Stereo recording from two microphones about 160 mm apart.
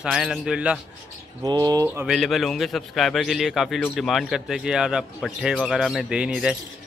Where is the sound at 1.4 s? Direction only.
25° right (ahead or behind).